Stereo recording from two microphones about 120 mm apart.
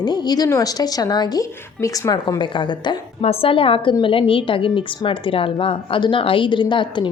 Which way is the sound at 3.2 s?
55° left (ahead or behind).